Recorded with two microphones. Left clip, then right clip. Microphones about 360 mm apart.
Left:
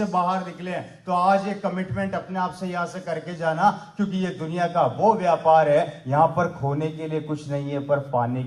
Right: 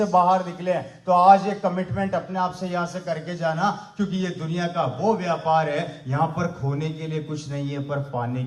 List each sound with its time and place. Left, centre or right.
0.0 s a man's voice: centre